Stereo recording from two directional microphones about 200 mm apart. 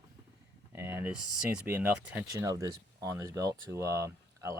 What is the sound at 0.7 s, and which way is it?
Speech, 10° right (ahead or behind).